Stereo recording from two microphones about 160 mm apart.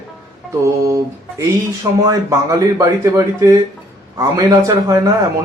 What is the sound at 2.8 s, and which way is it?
Speech, 20° right (ahead or behind).